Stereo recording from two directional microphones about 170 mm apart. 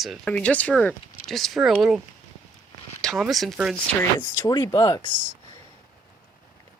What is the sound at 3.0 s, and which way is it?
Speech, centre (ahead or behind).